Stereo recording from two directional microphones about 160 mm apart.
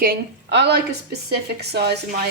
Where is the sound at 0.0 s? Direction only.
80° right.